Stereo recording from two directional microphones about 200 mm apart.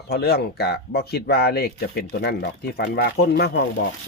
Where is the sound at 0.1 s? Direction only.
50° left (ahead or behind).